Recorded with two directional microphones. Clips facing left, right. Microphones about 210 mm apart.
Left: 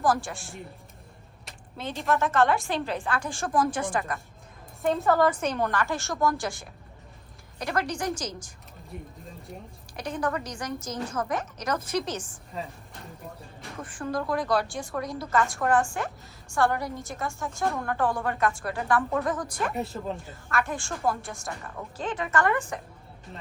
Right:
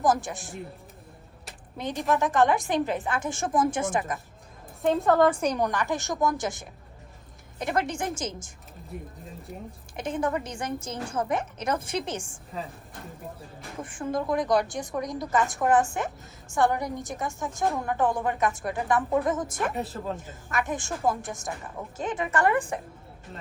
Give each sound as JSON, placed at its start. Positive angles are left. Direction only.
{"t": 0.0, "sound": "a woman's voice", "side_deg": -20}
{"t": 1.8, "sound": "a woman's voice", "side_deg": -15}
{"t": 4.8, "sound": "a woman's voice", "side_deg": 0}
{"t": 5.3, "sound": "a woman's voice", "side_deg": -10}
{"t": 8.9, "sound": "a woman's voice", "side_deg": 0}
{"t": 10.0, "sound": "a woman's voice", "side_deg": -25}
{"t": 13.7, "sound": "a woman's voice", "side_deg": -20}
{"t": 19.6, "sound": "a woman's voice", "side_deg": 0}
{"t": 20.1, "sound": "a woman's voice", "side_deg": -20}
{"t": 22.2, "sound": "a woman's voice", "side_deg": -30}